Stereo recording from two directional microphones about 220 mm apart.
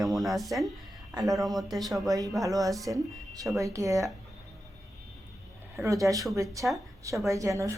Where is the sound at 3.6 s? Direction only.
15° right (ahead or behind).